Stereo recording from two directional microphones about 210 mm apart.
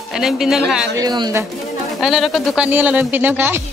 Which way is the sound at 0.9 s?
20° right (ahead or behind).